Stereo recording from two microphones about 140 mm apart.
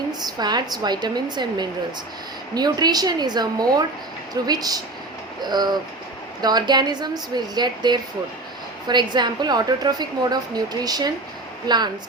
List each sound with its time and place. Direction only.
0.1 s a woman's voice: 30° right (ahead or behind)